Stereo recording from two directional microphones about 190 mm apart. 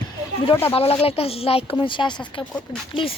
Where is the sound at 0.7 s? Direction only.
30° left (ahead or behind).